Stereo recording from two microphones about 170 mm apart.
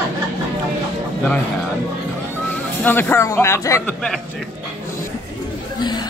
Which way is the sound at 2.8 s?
10° left (ahead or behind).